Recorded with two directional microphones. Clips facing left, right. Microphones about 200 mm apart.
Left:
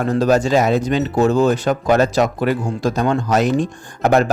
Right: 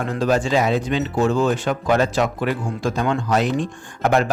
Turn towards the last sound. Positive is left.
turn(degrees=40)  # may be behind; listen again after turning